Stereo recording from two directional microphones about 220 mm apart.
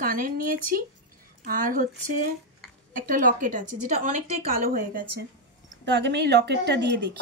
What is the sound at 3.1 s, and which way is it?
Speech, 40° right (ahead or behind).